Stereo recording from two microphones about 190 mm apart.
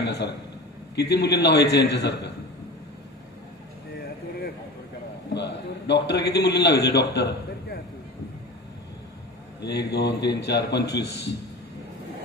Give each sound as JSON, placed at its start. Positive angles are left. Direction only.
{"t": 0.0, "sound": "a sound", "side_deg": 60}
{"t": 0.9, "sound": "a man's voice", "side_deg": 60}
{"t": 5.3, "sound": "a man's voice", "side_deg": 65}
{"t": 9.6, "sound": "a man's voice", "side_deg": 60}